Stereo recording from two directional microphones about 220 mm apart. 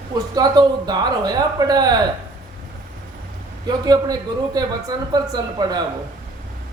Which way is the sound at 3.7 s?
20° right (ahead or behind).